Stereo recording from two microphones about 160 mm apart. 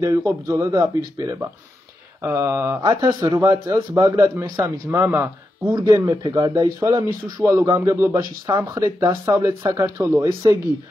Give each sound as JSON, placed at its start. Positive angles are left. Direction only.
{"t": 0.0, "sound": "speech", "side_deg": -20}
{"t": 5.8, "sound": "speech", "side_deg": -25}